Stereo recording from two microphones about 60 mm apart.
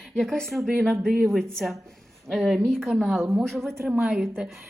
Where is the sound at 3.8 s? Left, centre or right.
Right.